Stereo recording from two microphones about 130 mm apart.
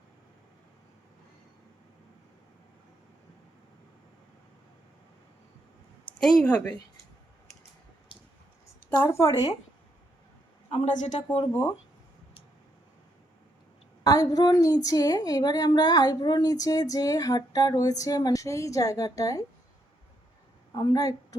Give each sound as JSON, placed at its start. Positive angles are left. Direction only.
{"t": 6.1, "sound": "speech", "side_deg": 5}
{"t": 9.0, "sound": "a woman's voice", "side_deg": 20}
{"t": 10.8, "sound": "a man's voice", "side_deg": 70}
{"t": 14.0, "sound": "a woman's voice", "side_deg": 25}
{"t": 20.7, "sound": "a woman's voice", "side_deg": 30}